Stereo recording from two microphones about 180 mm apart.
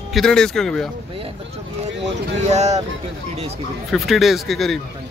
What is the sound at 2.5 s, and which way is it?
Speech, 40° right (ahead or behind).